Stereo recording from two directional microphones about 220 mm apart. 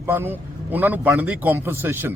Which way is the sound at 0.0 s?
10° right (ahead or behind).